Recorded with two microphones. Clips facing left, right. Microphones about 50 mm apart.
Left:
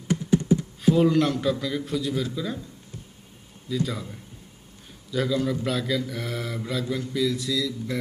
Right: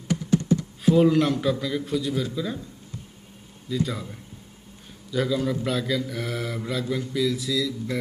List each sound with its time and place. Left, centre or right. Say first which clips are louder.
0.1 s computer keyboard: left 1 dB; centre
0.9 s speech: right 1 dB; centre
3.7 s speech: right 1 dB; centre